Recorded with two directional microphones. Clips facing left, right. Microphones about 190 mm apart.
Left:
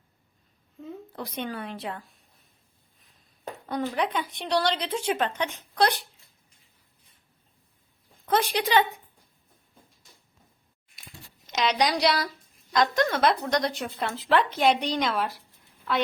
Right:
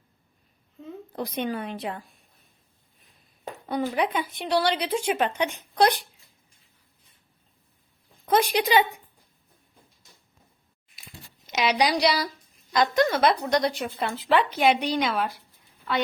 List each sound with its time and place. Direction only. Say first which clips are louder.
1.1 s a woman's voice: right 5 dB; 15° right (ahead or behind)
3.4 s a woman's voice: right 2 dB; 10° right (ahead or behind)
8.3 s a woman's voice: right 2 dB; 15° right (ahead or behind)
11.5 s a woman's voice: right 2 dB; 5° right (ahead or behind)